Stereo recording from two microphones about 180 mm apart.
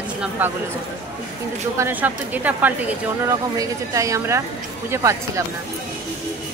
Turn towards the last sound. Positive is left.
turn(degrees=-15)  # may be behind; listen again after turning